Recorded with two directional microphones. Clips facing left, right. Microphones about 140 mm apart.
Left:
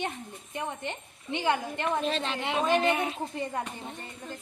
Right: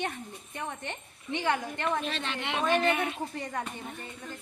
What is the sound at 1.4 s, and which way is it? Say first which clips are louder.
A woman's voice: left 2 dB; 25° left (ahead or behind).